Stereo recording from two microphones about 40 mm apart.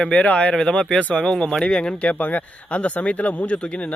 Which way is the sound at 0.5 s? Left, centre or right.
Centre.